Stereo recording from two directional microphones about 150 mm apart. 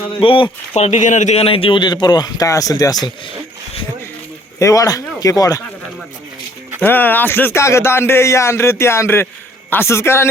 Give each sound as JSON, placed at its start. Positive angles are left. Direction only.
{"t": 0.2, "sound": "speech", "side_deg": 35}
{"t": 0.8, "sound": "a man's voice", "side_deg": 55}
{"t": 4.6, "sound": "a man's voice", "side_deg": 20}
{"t": 6.8, "sound": "a man's voice", "side_deg": 10}